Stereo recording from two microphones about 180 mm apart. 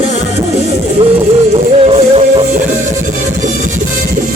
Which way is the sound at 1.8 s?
35° right (ahead or behind).